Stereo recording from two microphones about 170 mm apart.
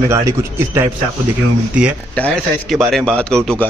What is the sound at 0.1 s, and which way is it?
Speech, 15° right (ahead or behind).